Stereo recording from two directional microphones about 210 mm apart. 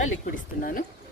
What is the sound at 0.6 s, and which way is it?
Speech, 40° left (ahead or behind).